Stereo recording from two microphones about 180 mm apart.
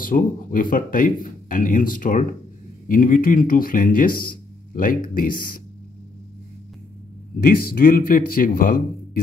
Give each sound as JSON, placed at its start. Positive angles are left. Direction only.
{"t": 0.0, "sound": "speech", "side_deg": 50}
{"t": 7.4, "sound": "speech", "side_deg": 55}